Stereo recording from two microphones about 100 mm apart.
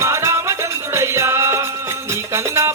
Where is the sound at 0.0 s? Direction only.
30° right (ahead or behind).